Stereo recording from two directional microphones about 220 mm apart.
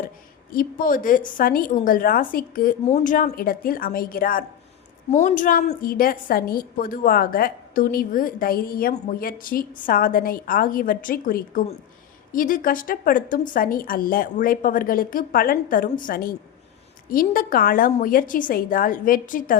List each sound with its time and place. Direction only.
0.5 s a woman's voice: 40° left (ahead or behind)